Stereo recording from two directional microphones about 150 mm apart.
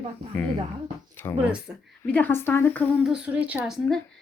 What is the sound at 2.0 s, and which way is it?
A woman's voice, 10° left (ahead or behind).